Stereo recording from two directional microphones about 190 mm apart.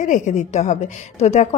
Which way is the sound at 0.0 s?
40° left (ahead or behind).